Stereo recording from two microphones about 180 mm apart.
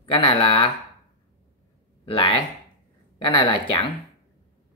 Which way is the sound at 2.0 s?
30° left (ahead or behind).